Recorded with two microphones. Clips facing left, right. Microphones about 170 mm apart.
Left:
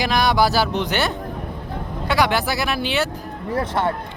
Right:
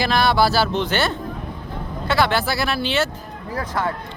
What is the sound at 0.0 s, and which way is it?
Speech, 15° left (ahead or behind).